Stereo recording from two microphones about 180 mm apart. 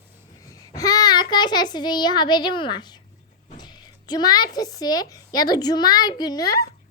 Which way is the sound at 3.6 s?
25° left (ahead or behind).